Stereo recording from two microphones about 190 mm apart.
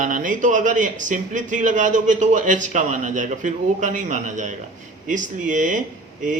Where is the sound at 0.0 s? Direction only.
45° right (ahead or behind).